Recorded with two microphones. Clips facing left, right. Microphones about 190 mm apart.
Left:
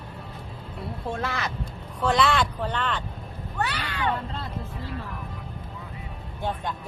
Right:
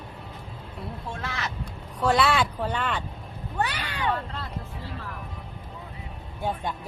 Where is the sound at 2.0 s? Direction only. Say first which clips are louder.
Even; 5° right (ahead or behind).